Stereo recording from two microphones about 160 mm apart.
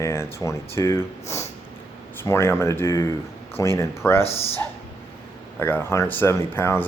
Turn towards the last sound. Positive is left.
turn(degrees=15)  # may be behind; listen again after turning